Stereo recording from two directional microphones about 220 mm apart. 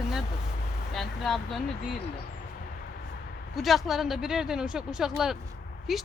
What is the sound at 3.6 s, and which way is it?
Speech, centre (ahead or behind).